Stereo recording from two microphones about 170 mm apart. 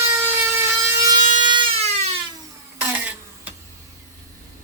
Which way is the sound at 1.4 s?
30° right (ahead or behind).